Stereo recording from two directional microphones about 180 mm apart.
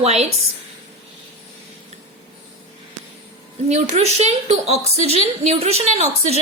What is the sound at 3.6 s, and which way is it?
A woman's voice, 40° right (ahead or behind).